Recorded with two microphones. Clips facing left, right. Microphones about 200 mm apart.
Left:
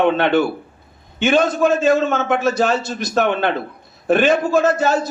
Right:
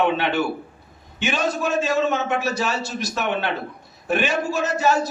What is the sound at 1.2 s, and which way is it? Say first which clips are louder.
A man's voice: left 8 dB; 55° left (ahead or behind).